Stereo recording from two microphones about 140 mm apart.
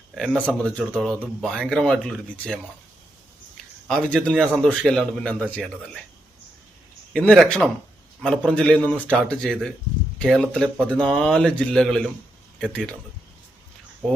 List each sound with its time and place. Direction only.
0.1 s speech: 5° right (ahead or behind)
0.4 s speech: 10° left (ahead or behind)
3.8 s speech: 5° left (ahead or behind)
7.1 s speech: 5° left (ahead or behind)